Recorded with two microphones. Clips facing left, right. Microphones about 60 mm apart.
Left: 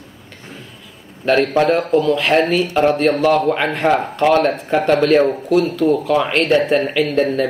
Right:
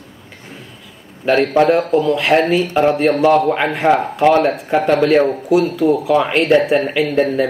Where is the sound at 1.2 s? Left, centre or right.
Centre.